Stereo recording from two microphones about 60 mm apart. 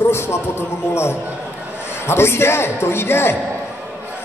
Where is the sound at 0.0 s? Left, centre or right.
Left.